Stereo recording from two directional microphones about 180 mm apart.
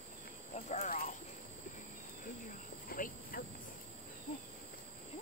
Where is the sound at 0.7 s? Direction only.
45° left (ahead or behind).